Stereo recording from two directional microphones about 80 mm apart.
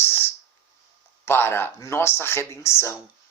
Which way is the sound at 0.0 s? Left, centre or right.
Left.